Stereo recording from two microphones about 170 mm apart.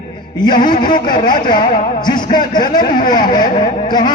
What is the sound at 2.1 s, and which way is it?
Speech, 55° left (ahead or behind).